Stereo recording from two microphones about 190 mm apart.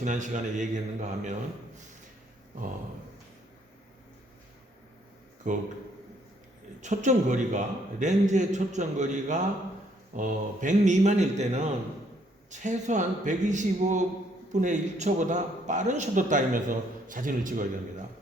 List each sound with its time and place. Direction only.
0.0 s a man's voice: 40° right (ahead or behind)
5.5 s speech: 40° right (ahead or behind)
6.8 s a man's voice: 40° right (ahead or behind)